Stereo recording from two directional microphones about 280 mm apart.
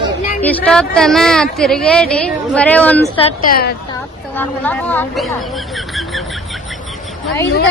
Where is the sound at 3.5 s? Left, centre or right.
Left.